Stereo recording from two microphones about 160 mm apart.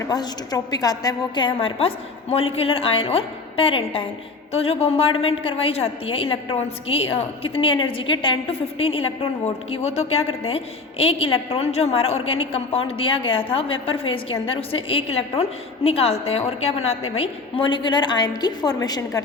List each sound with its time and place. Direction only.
0.1 s a woman's voice: 25° left (ahead or behind)